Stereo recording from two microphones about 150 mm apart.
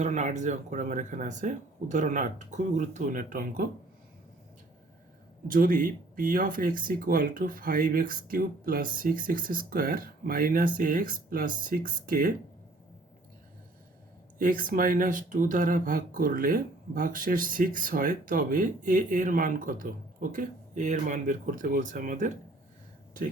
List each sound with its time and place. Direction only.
0.0 s speech: 55° right (ahead or behind)
5.5 s speech: 65° right (ahead or behind)
14.3 s speech: 65° right (ahead or behind)